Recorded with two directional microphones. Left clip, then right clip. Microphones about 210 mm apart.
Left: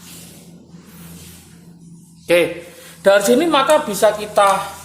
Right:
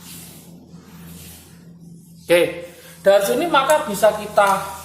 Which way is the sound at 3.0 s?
40° left (ahead or behind).